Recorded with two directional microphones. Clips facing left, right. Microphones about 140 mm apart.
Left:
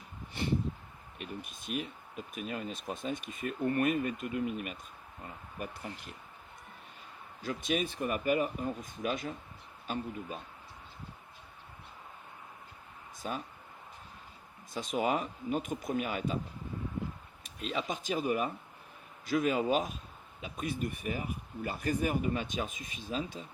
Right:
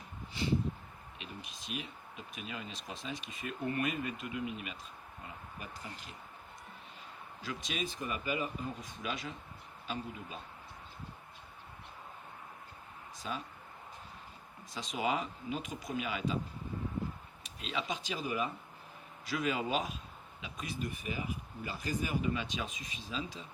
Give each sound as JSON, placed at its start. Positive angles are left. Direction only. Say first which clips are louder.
{"t": 1.2, "sound": "speech", "louder": "left 6 dB", "side_deg": 50}
{"t": 7.4, "sound": "speech", "louder": "left 6 dB", "side_deg": 50}
{"t": 13.2, "sound": "speech", "louder": "left 3 dB", "side_deg": 45}
{"t": 14.7, "sound": "speech", "louder": "left 3 dB", "side_deg": 55}
{"t": 17.4, "sound": "speech", "louder": "left 3 dB", "side_deg": 50}